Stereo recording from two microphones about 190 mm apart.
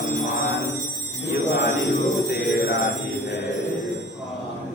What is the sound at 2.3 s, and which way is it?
Mantra, 55° left (ahead or behind).